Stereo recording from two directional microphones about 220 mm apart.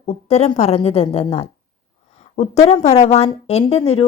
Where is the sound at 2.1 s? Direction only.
30° left (ahead or behind).